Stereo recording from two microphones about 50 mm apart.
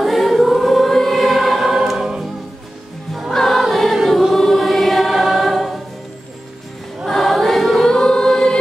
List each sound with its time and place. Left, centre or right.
0.0 s choir: centre
3.3 s choir: centre
7.1 s choir: centre